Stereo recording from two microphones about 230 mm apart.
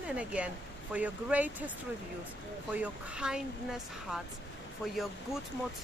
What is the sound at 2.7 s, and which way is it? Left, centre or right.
Speech, centre.